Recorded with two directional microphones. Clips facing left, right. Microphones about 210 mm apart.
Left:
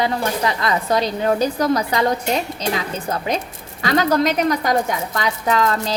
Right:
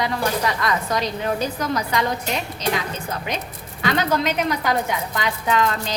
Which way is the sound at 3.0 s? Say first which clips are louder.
Left 5 dB; 35° left (ahead or behind).